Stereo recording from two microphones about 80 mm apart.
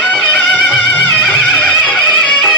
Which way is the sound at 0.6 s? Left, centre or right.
Centre.